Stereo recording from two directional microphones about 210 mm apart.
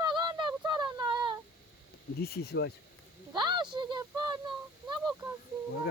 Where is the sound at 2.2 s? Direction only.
50° left (ahead or behind).